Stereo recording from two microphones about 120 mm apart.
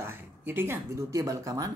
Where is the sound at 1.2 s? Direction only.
30° right (ahead or behind).